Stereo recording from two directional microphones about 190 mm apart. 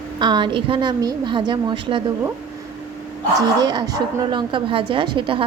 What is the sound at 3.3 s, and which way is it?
A woman's voice, 20° right (ahead or behind).